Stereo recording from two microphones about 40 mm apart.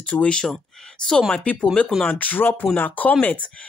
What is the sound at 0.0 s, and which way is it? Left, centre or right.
Speech, left.